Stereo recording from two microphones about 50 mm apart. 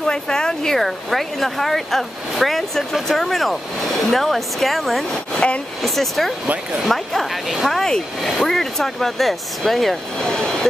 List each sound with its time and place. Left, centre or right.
0.0 s speech: centre
6.4 s speech: right
6.8 s speech: centre
7.8 s speech: centre